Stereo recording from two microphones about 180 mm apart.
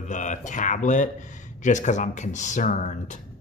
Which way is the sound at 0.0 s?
45° left (ahead or behind).